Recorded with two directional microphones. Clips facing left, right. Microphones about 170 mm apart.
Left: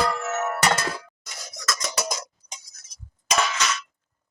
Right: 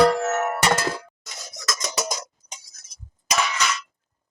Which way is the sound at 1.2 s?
20° right (ahead or behind).